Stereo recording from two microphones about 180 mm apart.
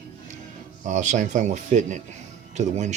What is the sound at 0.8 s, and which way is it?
Speech, 40° right (ahead or behind).